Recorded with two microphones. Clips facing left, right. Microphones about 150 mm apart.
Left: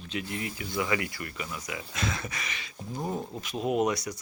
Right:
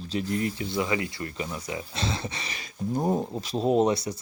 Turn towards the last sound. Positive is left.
turn(degrees=-30)  # may be behind; listen again after turning